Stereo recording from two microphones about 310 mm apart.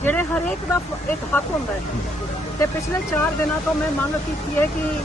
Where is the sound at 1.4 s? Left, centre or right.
Centre.